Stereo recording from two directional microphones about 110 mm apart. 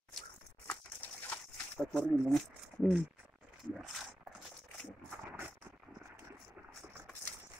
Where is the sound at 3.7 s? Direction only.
Centre (ahead or behind).